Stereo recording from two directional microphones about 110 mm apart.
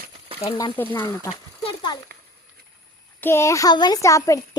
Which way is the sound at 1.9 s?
40° left (ahead or behind).